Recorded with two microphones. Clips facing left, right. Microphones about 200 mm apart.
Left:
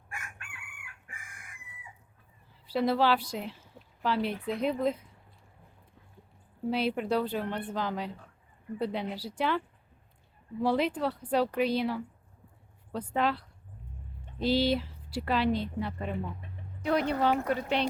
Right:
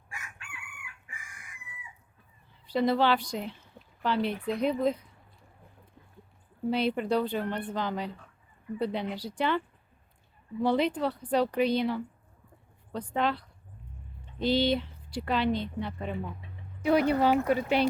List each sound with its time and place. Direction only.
0.1 s chicken: 55° left (ahead or behind)
2.6 s speech: 5° left (ahead or behind)
6.7 s speech: 5° left (ahead or behind)
16.4 s chicken: 50° left (ahead or behind)
16.8 s speech: 5° right (ahead or behind)